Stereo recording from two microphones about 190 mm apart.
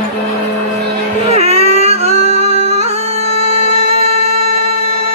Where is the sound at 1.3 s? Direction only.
35° right (ahead or behind).